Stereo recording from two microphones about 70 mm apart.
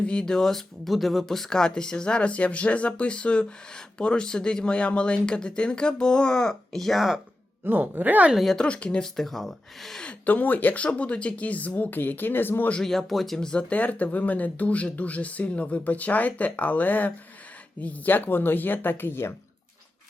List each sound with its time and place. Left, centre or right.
0.0 s speech: centre
7.6 s speech: right
8.5 s speech: centre
10.0 s speech: centre
12.8 s speech: centre; by 19.3 s left